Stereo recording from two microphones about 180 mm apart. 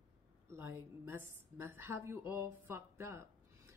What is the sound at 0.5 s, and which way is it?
A woman's voice, 15° right (ahead or behind).